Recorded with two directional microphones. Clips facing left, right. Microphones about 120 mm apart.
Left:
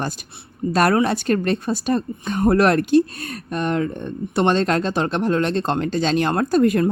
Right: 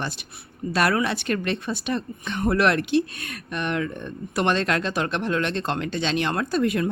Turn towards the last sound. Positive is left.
turn(degrees=45)  # may be behind; listen again after turning